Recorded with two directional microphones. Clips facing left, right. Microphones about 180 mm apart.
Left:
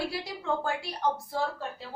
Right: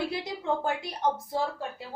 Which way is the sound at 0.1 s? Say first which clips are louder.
Right 2 dB; 20° right (ahead or behind).